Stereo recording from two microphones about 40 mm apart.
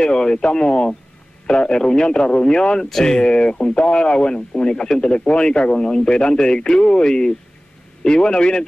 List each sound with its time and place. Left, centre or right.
0.0 s speech: centre